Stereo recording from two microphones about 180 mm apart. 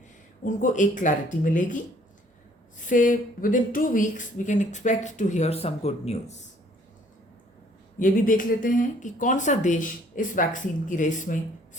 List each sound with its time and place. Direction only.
0.4 s speech: 45° left (ahead or behind)
7.9 s speech: 50° left (ahead or behind)